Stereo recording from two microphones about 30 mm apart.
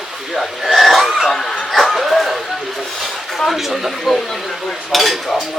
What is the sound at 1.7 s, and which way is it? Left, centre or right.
Speech, centre.